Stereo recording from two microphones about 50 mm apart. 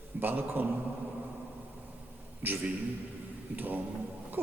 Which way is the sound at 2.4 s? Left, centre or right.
Right.